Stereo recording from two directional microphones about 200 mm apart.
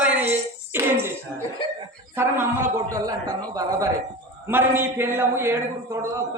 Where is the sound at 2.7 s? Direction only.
15° right (ahead or behind).